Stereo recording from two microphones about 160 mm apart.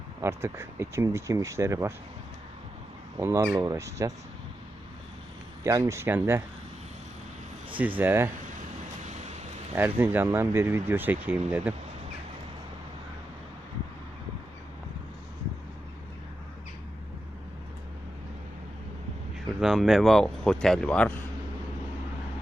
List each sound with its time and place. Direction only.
0.2 s speech: 15° right (ahead or behind)
3.2 s speech: 15° right (ahead or behind)
5.6 s speech: 20° right (ahead or behind)
7.8 s speech: 10° right (ahead or behind)
9.0 s vehicle: 45° right (ahead or behind)
9.7 s speech: 15° right (ahead or behind)
19.5 s speech: centre (ahead or behind)